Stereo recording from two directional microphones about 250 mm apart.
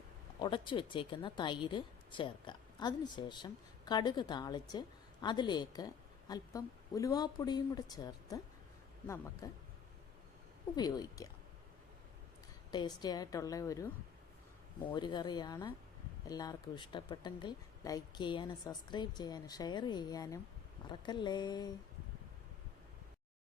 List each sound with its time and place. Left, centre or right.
0.3 s a woman's voice: centre
10.8 s a woman's voice: centre
12.7 s a woman's voice: centre
14.8 s a woman's voice: centre